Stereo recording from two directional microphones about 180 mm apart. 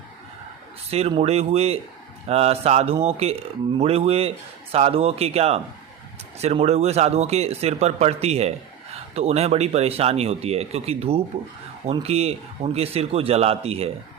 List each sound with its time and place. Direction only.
0.9 s speech: 35° right (ahead or behind)